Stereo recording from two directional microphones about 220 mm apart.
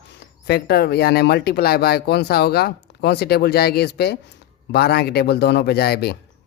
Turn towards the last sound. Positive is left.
turn(degrees=45)  # may be behind; listen again after turning